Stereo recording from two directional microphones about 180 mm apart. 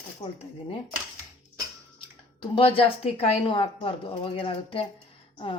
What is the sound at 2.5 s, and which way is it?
A woman's voice, 30° left (ahead or behind).